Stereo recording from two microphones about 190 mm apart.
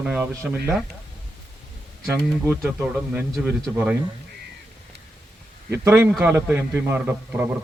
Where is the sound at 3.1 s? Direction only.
10° right (ahead or behind).